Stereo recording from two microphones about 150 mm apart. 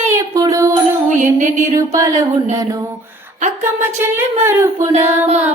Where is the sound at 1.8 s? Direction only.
20° right (ahead or behind).